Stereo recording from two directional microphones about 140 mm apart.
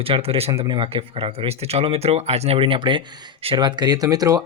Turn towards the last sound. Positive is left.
turn(degrees=-25)  # may be behind; listen again after turning